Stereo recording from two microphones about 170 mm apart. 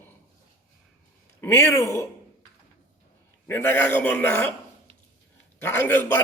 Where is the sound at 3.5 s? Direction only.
10° left (ahead or behind).